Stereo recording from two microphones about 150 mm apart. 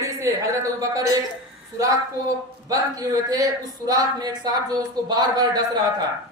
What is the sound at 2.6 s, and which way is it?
A man's voice, 25° right (ahead or behind).